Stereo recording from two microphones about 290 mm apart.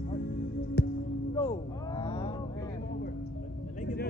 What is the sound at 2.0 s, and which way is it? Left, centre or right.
Vehicle, centre.